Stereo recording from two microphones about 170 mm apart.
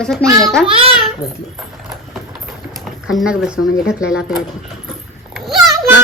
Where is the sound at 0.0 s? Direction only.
5° left (ahead or behind).